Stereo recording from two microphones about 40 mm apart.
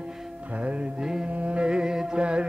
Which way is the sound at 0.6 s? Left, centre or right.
Right.